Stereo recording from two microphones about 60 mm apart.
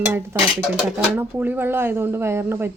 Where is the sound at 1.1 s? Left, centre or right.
Right.